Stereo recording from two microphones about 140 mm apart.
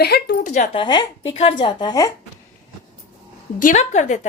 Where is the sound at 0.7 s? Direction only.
35° left (ahead or behind).